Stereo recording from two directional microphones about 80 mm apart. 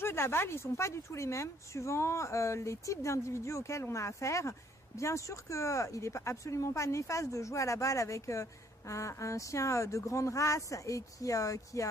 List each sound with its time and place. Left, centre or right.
0.0 s a woman's voice: left